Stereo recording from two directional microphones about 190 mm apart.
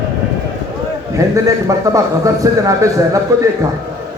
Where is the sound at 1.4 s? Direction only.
15° right (ahead or behind).